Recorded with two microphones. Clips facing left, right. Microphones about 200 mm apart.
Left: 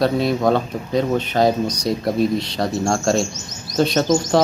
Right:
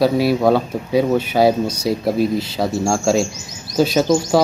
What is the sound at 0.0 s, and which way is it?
Speech, 5° right (ahead or behind).